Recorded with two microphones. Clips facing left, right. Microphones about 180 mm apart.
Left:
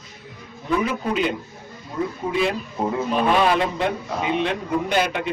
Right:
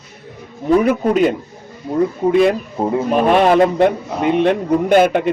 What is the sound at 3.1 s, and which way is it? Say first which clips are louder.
A man's voice: right 7 dB; 45° right (ahead or behind).